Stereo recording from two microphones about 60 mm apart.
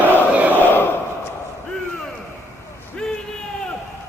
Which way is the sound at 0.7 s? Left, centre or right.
Left.